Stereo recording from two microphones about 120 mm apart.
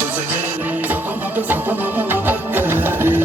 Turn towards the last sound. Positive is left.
turn(degrees=-15)  # may be behind; listen again after turning